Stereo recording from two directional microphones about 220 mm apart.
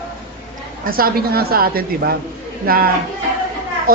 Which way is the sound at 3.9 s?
40° right (ahead or behind).